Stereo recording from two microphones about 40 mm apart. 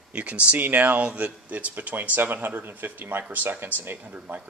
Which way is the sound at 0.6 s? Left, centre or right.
Right.